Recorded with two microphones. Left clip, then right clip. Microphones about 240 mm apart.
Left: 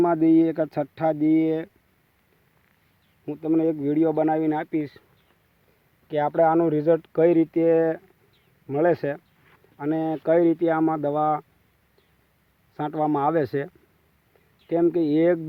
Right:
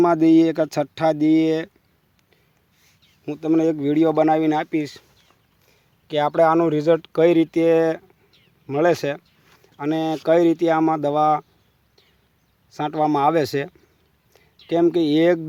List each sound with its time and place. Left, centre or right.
0.0 s speech: centre
3.2 s speech: centre
6.1 s speech: centre
12.7 s speech: centre